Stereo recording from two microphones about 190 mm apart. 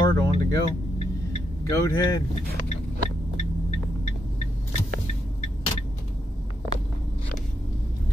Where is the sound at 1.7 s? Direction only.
15° left (ahead or behind).